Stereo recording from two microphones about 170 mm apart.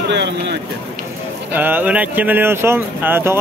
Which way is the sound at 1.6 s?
10° right (ahead or behind).